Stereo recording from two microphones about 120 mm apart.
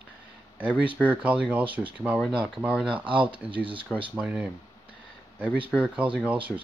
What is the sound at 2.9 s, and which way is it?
Speech, 45° right (ahead or behind).